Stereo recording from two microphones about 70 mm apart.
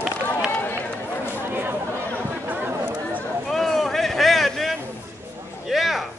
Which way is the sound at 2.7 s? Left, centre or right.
Right.